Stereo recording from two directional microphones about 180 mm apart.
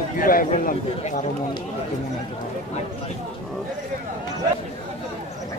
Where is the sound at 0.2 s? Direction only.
50° left (ahead or behind).